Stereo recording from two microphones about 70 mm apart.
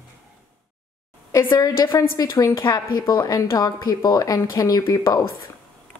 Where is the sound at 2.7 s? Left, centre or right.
Left.